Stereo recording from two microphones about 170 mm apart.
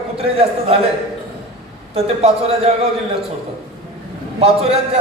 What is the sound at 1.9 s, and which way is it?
Speech, 35° right (ahead or behind).